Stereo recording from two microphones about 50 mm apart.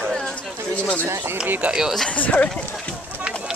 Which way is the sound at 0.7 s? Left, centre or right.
Left.